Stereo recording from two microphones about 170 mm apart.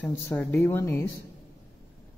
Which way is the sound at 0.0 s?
15° left (ahead or behind).